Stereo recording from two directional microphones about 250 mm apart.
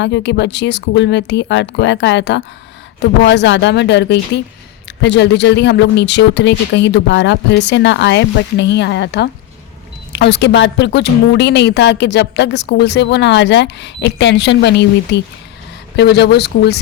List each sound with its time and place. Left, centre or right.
0.0 s a woman's voice: left